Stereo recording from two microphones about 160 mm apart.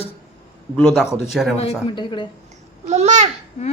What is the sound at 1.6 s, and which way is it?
Speech, 35° left (ahead or behind).